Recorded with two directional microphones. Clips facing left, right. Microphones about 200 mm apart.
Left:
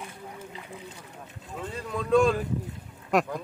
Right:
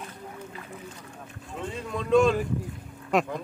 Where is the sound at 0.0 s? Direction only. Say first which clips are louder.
Right 1 dB; 20° left (ahead or behind).